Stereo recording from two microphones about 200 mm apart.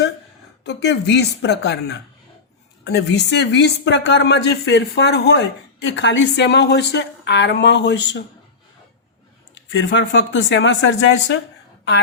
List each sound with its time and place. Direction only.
0.6 s speech: 55° left (ahead or behind)
9.7 s speech: 65° left (ahead or behind)